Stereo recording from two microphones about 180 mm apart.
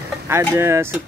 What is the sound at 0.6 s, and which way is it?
Speech, 15° right (ahead or behind).